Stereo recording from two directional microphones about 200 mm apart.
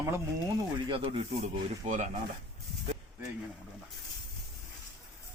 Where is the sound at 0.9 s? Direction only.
30° right (ahead or behind).